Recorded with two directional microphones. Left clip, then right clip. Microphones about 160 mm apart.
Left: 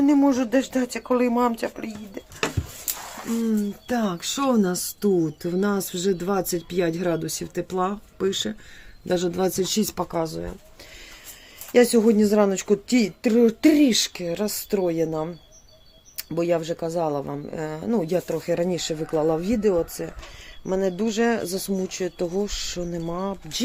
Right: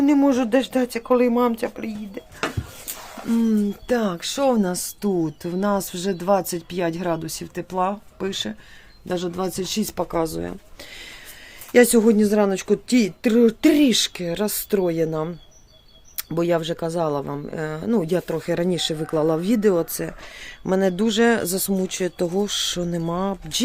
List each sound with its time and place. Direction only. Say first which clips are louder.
0.0 s speech: right 1 dB; 30° right (ahead or behind)
3.4 s speech: right 3 dB; 25° right (ahead or behind)
9.0 s speech: left 2 dB; centre (ahead or behind); by 10.5 s 20° right (ahead or behind)
11.7 s speech: right 2 dB; 20° right (ahead or behind)